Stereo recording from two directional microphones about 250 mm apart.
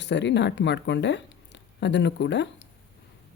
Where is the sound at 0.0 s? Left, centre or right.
Left.